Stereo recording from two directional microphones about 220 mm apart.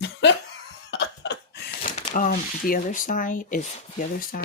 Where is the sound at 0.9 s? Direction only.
50° left (ahead or behind).